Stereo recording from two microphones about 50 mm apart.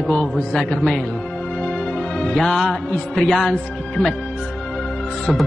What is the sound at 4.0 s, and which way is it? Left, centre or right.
Speech, centre.